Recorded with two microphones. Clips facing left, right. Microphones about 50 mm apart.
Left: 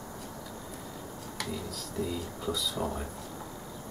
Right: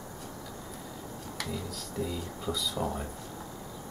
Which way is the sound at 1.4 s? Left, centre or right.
Centre.